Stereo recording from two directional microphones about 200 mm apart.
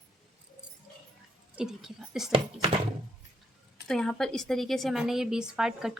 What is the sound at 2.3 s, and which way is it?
Speech, 25° right (ahead or behind).